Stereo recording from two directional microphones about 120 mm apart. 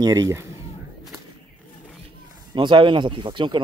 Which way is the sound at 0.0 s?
30° right (ahead or behind).